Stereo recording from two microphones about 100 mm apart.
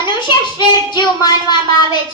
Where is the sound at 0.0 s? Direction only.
50° left (ahead or behind).